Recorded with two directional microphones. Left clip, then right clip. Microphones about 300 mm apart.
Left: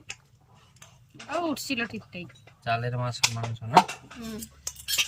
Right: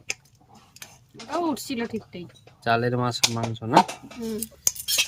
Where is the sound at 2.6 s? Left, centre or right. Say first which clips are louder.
Right 6 dB; centre.